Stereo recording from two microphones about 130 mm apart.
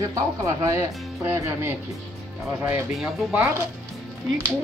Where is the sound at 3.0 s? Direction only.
Centre (ahead or behind).